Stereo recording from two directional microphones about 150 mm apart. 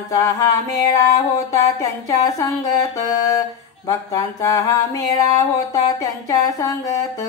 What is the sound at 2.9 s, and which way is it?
Music, 25° left (ahead or behind).